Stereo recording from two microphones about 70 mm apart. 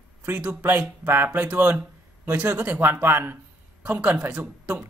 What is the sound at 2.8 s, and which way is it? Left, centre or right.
Speech, right.